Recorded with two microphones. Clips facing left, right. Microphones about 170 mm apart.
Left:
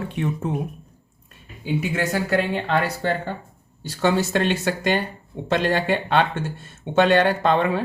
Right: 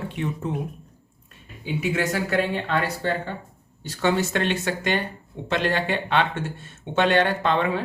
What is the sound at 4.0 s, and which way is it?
Speech, 35° left (ahead or behind).